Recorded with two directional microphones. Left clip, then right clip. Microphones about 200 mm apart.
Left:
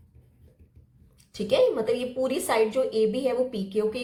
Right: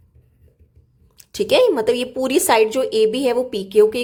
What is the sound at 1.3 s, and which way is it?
A woman's voice, 50° right (ahead or behind).